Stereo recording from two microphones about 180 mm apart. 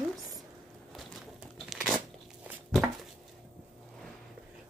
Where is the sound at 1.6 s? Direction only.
Centre (ahead or behind).